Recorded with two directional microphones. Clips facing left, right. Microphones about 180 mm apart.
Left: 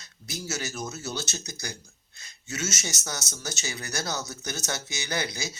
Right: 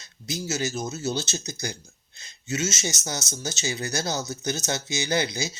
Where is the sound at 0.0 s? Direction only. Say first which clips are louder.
Right 5 dB; 20° right (ahead or behind).